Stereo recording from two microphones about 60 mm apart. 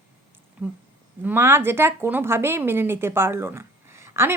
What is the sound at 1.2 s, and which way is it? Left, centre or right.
Speech, right.